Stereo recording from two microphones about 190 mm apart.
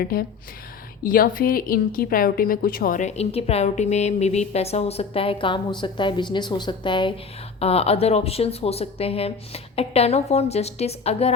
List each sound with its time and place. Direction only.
0.0 s a woman's voice: 50° left (ahead or behind); by 11.3 s 30° left (ahead or behind)